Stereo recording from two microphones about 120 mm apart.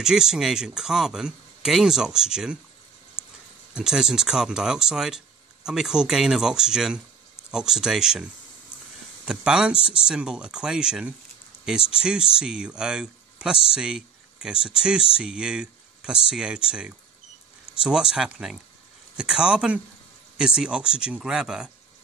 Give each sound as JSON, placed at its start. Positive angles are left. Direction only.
{"t": 0.0, "sound": "speech", "side_deg": -5}
{"t": 3.2, "sound": "a sound", "side_deg": -5}
{"t": 3.7, "sound": "speech", "side_deg": -5}
{"t": 9.8, "sound": "speech", "side_deg": 50}
{"t": 10.0, "sound": "speech", "side_deg": -5}